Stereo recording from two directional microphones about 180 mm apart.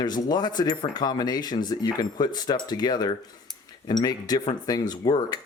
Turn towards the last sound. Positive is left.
turn(degrees=20)  # may be behind; listen again after turning